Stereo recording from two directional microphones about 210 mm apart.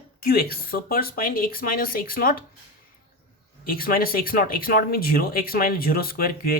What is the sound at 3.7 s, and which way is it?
Speech, 45° left (ahead or behind).